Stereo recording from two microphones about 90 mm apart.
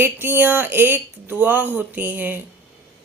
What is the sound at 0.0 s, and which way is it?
Speech, 25° right (ahead or behind).